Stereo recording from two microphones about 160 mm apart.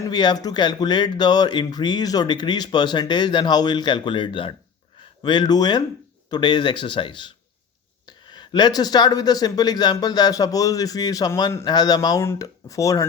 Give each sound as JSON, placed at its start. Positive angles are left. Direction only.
{"t": 0.0, "sound": "speech", "side_deg": 25}